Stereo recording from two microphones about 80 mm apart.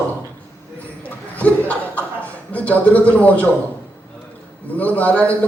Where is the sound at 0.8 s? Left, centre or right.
Centre.